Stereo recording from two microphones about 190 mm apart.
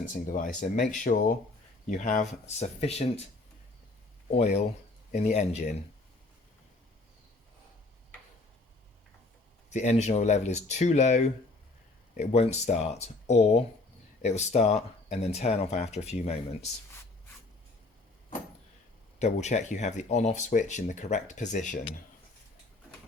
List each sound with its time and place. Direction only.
0.1 s speech: 45° left (ahead or behind)
4.3 s speech: 35° left (ahead or behind)
9.6 s speech: 40° left (ahead or behind)
19.2 s speech: 35° left (ahead or behind)